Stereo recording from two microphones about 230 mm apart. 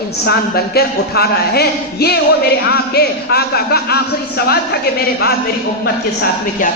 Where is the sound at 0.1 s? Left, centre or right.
Left.